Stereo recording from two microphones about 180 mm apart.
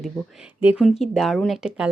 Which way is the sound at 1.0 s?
Centre (ahead or behind).